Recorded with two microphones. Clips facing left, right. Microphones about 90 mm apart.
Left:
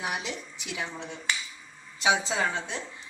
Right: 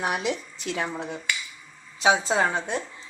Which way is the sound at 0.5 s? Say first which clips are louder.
Right 7 dB; 15° left (ahead or behind).